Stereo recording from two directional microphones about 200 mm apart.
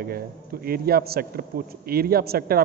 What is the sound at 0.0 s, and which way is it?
A man's voice, 50° right (ahead or behind).